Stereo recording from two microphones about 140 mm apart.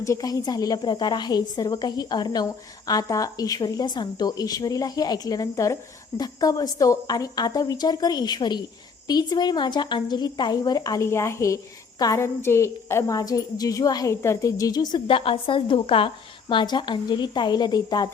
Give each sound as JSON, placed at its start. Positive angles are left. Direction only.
{"t": 0.0, "sound": "a woman's voice", "side_deg": 25}